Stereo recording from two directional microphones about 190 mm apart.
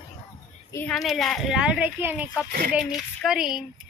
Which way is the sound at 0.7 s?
10° left (ahead or behind).